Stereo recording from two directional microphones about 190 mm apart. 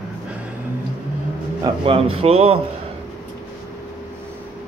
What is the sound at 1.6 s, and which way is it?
A man's voice, 30° right (ahead or behind).